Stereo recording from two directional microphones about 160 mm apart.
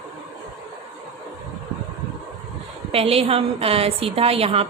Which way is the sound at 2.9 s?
35° right (ahead or behind).